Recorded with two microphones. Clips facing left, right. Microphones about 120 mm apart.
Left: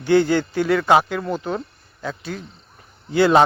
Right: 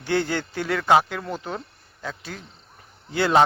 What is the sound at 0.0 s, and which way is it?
Speech, 10° left (ahead or behind).